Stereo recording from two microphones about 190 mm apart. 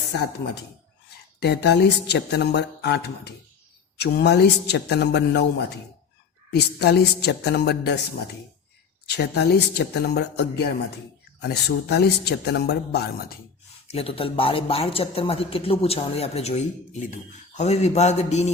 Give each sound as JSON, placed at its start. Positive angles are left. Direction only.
{"t": 1.4, "sound": "speech", "side_deg": 60}
{"t": 9.0, "sound": "speech", "side_deg": 60}
{"t": 13.8, "sound": "speech", "side_deg": 30}